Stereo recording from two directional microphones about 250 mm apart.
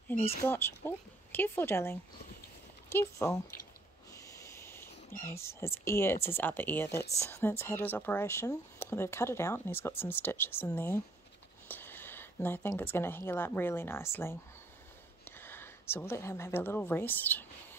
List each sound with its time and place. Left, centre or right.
0.5 s speech: centre